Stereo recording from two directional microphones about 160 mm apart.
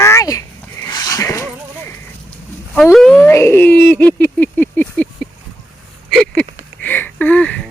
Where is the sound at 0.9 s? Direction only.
25° left (ahead or behind).